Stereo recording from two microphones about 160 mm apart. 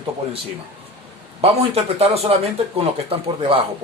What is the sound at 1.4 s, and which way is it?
Speech, 40° right (ahead or behind).